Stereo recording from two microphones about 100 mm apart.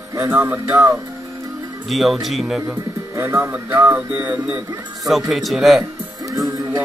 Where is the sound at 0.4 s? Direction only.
20° right (ahead or behind).